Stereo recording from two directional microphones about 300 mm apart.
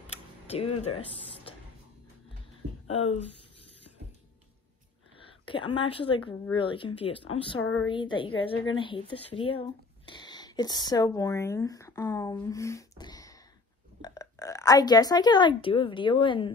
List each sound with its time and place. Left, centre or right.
0.1 s a sound: centre
0.7 s speech: centre
3.0 s speech: centre
5.2 s a woman's voice: centre